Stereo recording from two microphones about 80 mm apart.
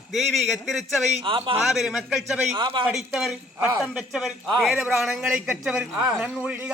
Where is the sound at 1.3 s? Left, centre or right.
Right.